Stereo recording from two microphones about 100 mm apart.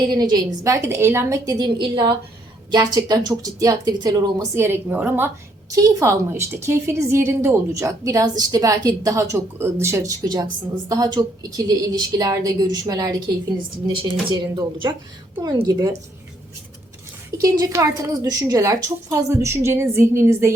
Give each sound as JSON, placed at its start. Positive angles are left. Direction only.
{"t": 0.1, "sound": "a woman's voice", "side_deg": -45}
{"t": 1.5, "sound": "a woman's voice", "side_deg": -45}
{"t": 4.5, "sound": "a woman's voice", "side_deg": -25}
{"t": 5.7, "sound": "a woman's voice", "side_deg": -35}
{"t": 13.6, "sound": "a woman's voice", "side_deg": -55}
{"t": 17.3, "sound": "a woman's voice", "side_deg": -40}